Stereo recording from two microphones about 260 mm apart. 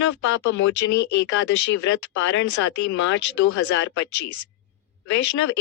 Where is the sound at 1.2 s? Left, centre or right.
Left.